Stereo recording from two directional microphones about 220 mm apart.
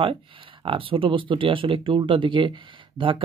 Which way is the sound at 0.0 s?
25° right (ahead or behind).